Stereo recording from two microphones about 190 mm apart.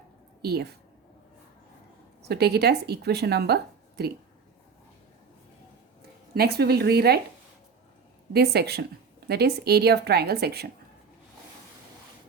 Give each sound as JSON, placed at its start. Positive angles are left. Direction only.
{"t": 0.4, "sound": "speech", "side_deg": -55}
{"t": 2.2, "sound": "speech", "side_deg": -60}
{"t": 6.3, "sound": "speech", "side_deg": -55}
{"t": 8.3, "sound": "speech", "side_deg": -55}